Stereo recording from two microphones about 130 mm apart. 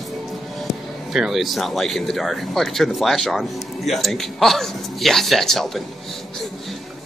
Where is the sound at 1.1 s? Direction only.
Centre (ahead or behind).